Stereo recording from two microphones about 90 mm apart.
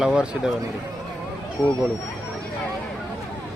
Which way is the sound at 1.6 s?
45° left (ahead or behind).